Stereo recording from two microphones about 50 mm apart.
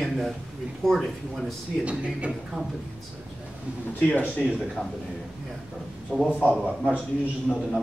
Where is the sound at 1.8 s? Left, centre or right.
Right.